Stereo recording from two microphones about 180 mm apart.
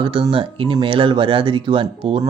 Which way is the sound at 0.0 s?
30° right (ahead or behind).